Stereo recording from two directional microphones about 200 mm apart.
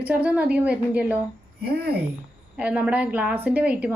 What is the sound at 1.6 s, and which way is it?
Speech, 50° right (ahead or behind).